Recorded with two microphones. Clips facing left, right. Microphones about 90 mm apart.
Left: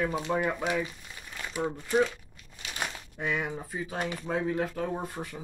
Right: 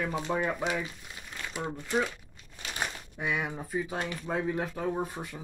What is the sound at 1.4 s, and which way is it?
Crumpling, 10° left (ahead or behind).